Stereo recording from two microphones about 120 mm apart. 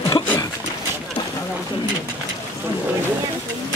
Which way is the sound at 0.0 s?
25° left (ahead or behind).